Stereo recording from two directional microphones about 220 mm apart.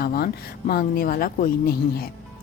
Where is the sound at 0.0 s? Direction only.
45° left (ahead or behind).